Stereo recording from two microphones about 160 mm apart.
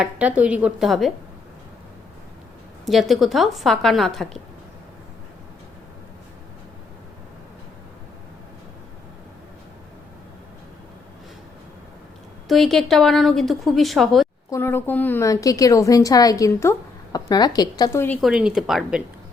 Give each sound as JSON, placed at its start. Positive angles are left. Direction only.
{"t": 0.0, "sound": "a woman's voice", "side_deg": -10}
{"t": 2.8, "sound": "a woman's voice", "side_deg": 0}
{"t": 12.5, "sound": "a woman's voice", "side_deg": 0}
{"t": 14.5, "sound": "a woman's voice", "side_deg": 15}
{"t": 18.2, "sound": "a woman's voice", "side_deg": -5}